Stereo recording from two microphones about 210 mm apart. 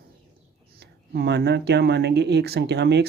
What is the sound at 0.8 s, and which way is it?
Speech, 50° right (ahead or behind).